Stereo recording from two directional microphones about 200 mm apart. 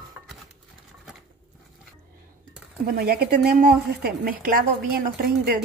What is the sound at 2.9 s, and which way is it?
Speech, 50° right (ahead or behind).